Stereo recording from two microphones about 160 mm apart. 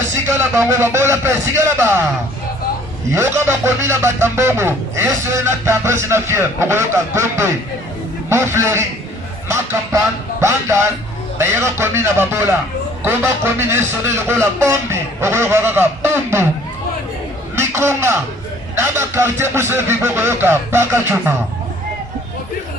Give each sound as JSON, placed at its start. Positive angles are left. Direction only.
{"t": 0.3, "sound": "speech", "side_deg": -15}
{"t": 3.1, "sound": "speech", "side_deg": -15}
{"t": 10.4, "sound": "speech", "side_deg": -15}
{"t": 17.5, "sound": "a sound", "side_deg": -15}
{"t": 18.8, "sound": "speech", "side_deg": -15}